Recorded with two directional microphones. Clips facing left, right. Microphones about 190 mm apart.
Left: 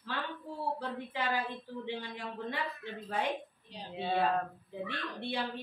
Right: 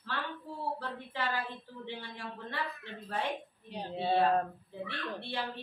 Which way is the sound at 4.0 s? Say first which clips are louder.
Right 3 dB; 35° right (ahead or behind).